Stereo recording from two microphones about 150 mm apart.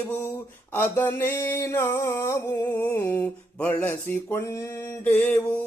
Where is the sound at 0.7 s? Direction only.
15° left (ahead or behind).